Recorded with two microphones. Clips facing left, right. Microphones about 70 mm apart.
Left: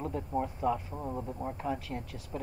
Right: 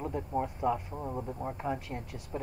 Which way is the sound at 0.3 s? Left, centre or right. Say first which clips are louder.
Even; centre.